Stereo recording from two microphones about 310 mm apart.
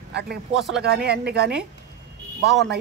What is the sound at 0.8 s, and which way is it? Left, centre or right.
Speech, right.